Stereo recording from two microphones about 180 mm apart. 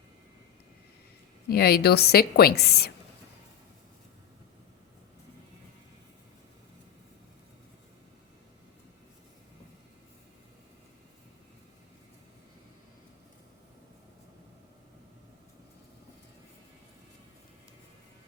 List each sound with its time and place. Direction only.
1.5 s a woman's voice: 60° left (ahead or behind)